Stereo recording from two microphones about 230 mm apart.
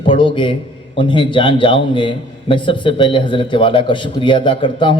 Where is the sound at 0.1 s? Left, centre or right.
Left.